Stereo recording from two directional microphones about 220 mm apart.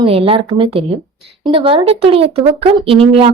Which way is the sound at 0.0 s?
25° right (ahead or behind).